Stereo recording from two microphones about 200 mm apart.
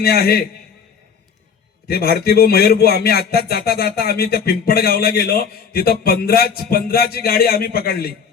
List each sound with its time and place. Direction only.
0.0 s speech: 50° left (ahead or behind)
1.9 s speech: 50° left (ahead or behind)